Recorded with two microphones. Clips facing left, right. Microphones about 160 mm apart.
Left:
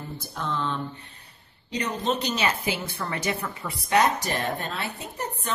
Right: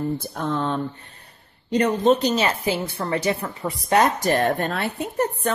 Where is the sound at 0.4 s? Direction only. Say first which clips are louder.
Right 3 dB; 50° right (ahead or behind).